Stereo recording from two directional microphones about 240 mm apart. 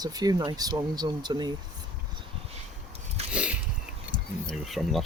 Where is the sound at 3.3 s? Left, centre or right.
Centre.